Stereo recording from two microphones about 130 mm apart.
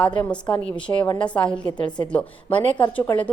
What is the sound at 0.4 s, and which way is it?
A woman's voice, 35° left (ahead or behind).